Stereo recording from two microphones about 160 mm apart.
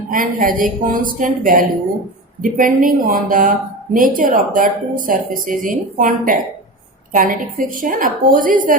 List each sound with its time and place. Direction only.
0.1 s speech: 60° right (ahead or behind)